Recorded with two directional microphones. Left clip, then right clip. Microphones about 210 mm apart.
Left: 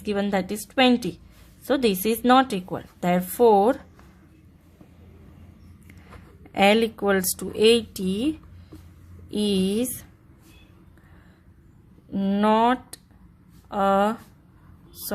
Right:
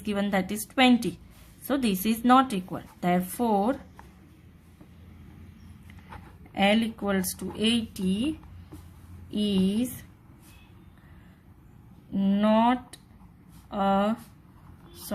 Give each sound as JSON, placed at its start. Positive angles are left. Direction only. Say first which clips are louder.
{"t": 0.0, "sound": "a woman's voice", "louder": "left 3 dB", "side_deg": 20}
{"t": 6.5, "sound": "speech", "louder": "left 6 dB", "side_deg": 35}
{"t": 12.1, "sound": "speech", "louder": "left 3 dB", "side_deg": 35}